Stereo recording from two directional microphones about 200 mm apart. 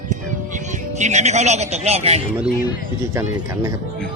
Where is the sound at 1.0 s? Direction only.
35° right (ahead or behind).